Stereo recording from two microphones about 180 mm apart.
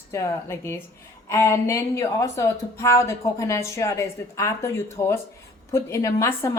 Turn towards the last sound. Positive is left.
turn(degrees=15)  # may be behind; listen again after turning